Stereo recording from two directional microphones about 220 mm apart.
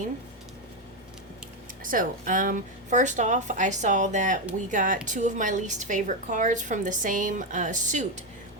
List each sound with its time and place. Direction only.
1.8 s a woman's voice: 40° right (ahead or behind)